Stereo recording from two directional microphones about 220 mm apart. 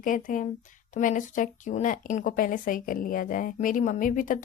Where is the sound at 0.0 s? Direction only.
35° left (ahead or behind).